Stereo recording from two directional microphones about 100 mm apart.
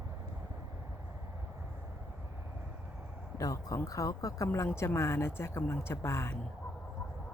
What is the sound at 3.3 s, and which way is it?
Speech, 35° left (ahead or behind).